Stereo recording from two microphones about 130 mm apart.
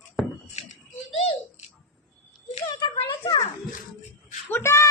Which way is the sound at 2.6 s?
35° left (ahead or behind).